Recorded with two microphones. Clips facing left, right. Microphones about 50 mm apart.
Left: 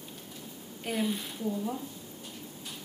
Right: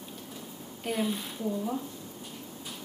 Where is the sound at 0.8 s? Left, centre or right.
Centre.